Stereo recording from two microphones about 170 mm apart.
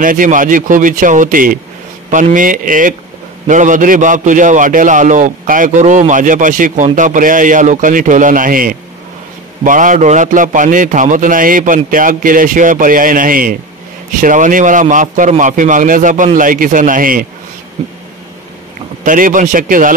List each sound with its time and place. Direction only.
0.0 s a man's voice: 50° right (ahead or behind)
19.0 s a man's voice: 50° right (ahead or behind)